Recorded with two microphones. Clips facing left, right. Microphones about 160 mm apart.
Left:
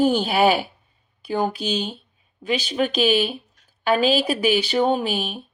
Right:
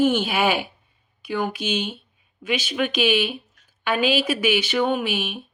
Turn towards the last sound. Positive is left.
turn(degrees=40)  # may be behind; listen again after turning